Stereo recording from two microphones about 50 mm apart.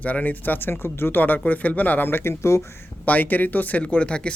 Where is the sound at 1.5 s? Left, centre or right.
Left.